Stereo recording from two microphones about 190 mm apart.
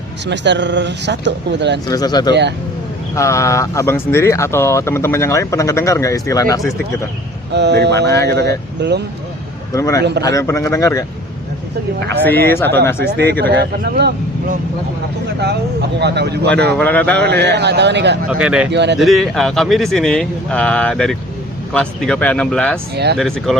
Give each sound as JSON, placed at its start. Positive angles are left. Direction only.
{"t": 0.3, "sound": "speech", "side_deg": -65}
{"t": 1.9, "sound": "speech", "side_deg": 20}
{"t": 7.5, "sound": "speech", "side_deg": -65}
{"t": 9.7, "sound": "speech", "side_deg": 15}
{"t": 12.1, "sound": "speech", "side_deg": 10}
{"t": 13.0, "sound": "speech", "side_deg": -55}
{"t": 15.4, "sound": "speech", "side_deg": -60}
{"t": 16.7, "sound": "speech", "side_deg": 10}
{"t": 17.4, "sound": "speech", "side_deg": -65}
{"t": 18.3, "sound": "speech", "side_deg": -5}
{"t": 18.7, "sound": "speech", "side_deg": -65}
{"t": 18.9, "sound": "speech", "side_deg": 0}